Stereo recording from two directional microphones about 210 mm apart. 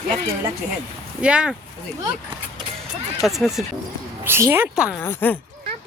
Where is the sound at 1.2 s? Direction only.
5° right (ahead or behind).